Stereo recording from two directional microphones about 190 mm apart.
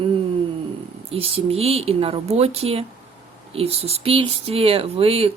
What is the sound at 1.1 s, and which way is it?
Speech, 30° right (ahead or behind).